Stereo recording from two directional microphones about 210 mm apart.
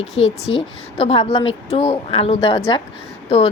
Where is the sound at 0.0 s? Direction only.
30° left (ahead or behind).